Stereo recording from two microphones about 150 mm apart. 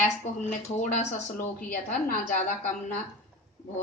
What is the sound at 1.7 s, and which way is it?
A woman's voice, 60° left (ahead or behind).